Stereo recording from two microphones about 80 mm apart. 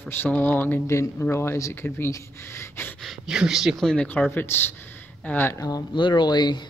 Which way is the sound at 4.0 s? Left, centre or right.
Left.